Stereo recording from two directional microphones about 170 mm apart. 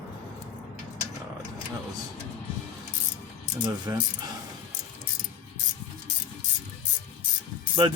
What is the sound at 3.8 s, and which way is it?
Speech, 25° right (ahead or behind).